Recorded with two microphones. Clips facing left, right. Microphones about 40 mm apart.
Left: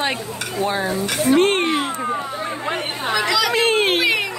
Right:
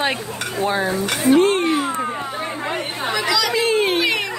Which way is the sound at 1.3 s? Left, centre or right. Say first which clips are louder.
Even; left.